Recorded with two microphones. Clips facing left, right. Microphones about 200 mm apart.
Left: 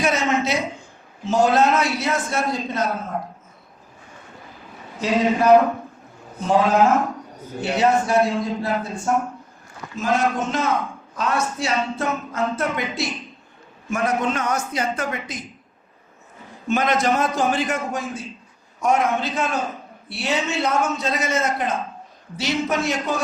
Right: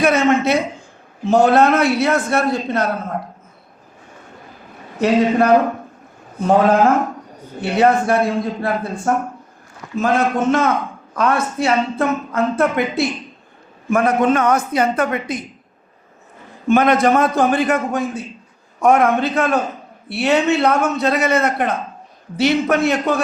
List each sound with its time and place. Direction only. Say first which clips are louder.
0.0 s a sound: right 6 dB; 55° right (ahead or behind)
1.2 s speech: right 5 dB; 60° right (ahead or behind)
4.9 s speech: right 5 dB; 60° right (ahead or behind)
6.5 s speech: right 4 dB; 55° right (ahead or behind)
16.6 s speech: right 6 dB; 55° right (ahead or behind)